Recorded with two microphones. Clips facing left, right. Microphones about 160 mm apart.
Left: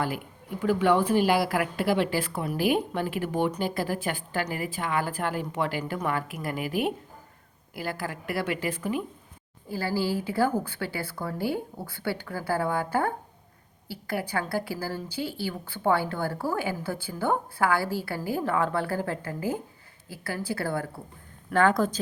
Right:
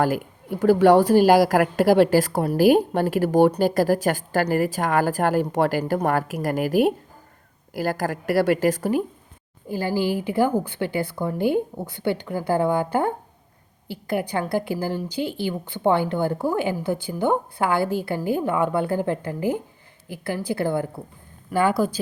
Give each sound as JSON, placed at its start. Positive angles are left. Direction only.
{"t": 0.0, "sound": "a woman's voice", "side_deg": -40}
{"t": 9.6, "sound": "a woman's voice", "side_deg": -20}
{"t": 21.5, "sound": "a woman's voice", "side_deg": -10}